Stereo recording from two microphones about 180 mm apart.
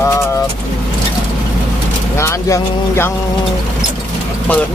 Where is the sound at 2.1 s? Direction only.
15° left (ahead or behind).